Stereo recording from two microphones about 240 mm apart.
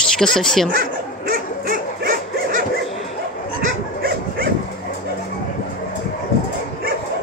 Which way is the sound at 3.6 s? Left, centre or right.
Right.